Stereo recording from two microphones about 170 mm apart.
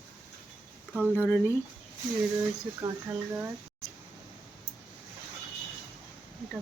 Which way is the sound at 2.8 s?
15° right (ahead or behind).